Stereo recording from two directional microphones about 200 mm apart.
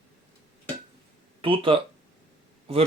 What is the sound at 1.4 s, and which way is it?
Speech, 25° right (ahead or behind).